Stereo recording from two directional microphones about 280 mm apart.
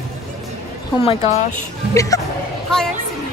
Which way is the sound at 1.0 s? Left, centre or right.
Left.